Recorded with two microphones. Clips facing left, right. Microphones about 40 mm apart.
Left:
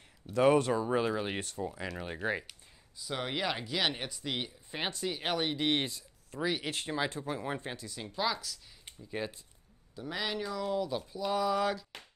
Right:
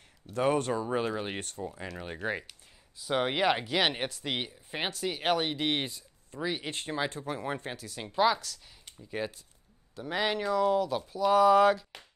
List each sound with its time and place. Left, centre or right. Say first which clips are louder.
0.4 s speech: left 2 dB; centre
3.0 s speech: right 7 dB; right
6.3 s speech: even; centre
7.7 s speech: right 2 dB; right
8.0 s speech: right 8 dB; right
10.0 s speech: right 6 dB; right